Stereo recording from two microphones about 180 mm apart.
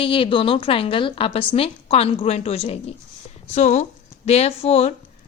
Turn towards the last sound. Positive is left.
turn(degrees=35)  # may be behind; listen again after turning